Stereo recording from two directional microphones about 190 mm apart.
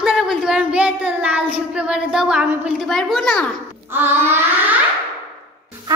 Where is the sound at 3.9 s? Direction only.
10° right (ahead or behind).